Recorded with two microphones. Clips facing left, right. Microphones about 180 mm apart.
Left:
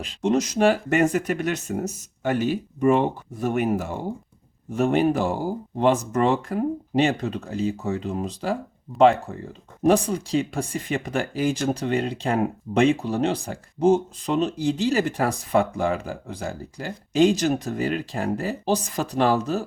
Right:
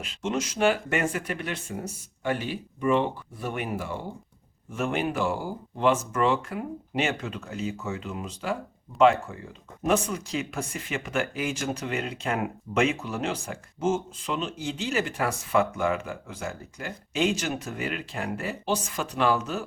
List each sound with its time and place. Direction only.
0.0 s speech: 35° left (ahead or behind)